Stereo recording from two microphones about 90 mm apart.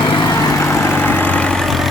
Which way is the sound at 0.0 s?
60° left (ahead or behind).